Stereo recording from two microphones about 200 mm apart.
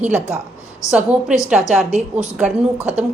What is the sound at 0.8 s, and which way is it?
Speech, 15° left (ahead or behind).